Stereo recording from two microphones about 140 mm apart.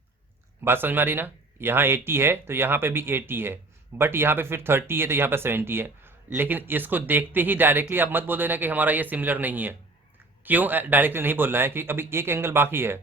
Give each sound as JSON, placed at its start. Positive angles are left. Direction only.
{"t": 0.6, "sound": "speech", "side_deg": -15}